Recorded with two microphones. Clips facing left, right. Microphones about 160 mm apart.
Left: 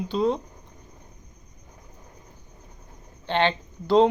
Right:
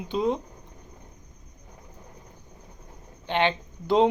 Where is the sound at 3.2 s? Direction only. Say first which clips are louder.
Left 1 dB; 15° right (ahead or behind).